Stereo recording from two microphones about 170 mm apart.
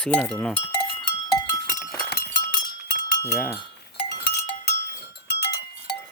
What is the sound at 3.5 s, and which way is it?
Cowbell, 30° left (ahead or behind).